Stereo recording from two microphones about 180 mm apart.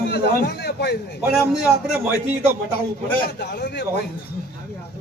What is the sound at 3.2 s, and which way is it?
Speech, 65° left (ahead or behind).